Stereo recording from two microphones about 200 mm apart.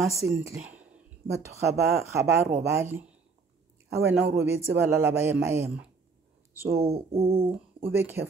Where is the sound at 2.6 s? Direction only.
10° right (ahead or behind).